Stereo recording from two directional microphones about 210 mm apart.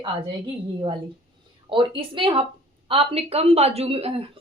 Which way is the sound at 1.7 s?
25° right (ahead or behind).